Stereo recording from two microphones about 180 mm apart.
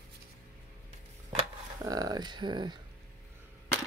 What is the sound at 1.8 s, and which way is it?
Speech, 20° right (ahead or behind).